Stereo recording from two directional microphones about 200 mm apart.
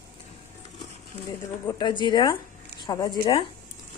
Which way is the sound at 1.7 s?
20° left (ahead or behind).